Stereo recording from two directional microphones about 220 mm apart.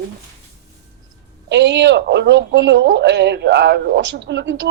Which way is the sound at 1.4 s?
55° right (ahead or behind).